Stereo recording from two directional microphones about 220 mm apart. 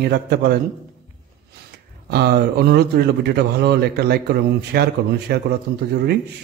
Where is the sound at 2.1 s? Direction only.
45° right (ahead or behind).